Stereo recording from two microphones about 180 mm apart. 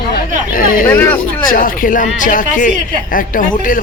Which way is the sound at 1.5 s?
50° left (ahead or behind).